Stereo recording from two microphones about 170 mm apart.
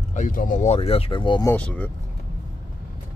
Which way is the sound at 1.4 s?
10° left (ahead or behind).